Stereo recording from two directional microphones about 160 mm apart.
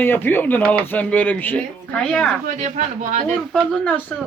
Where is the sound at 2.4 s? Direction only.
50° right (ahead or behind).